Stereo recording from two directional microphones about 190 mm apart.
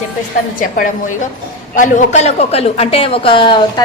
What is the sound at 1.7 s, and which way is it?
A woman's voice, 40° left (ahead or behind).